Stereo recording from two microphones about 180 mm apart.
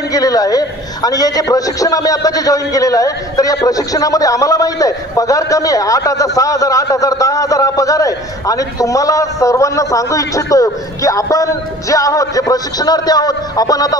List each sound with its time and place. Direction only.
0.1 s a man's voice: 20° left (ahead or behind)